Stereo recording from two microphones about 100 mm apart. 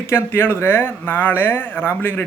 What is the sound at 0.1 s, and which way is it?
Speech, 25° left (ahead or behind).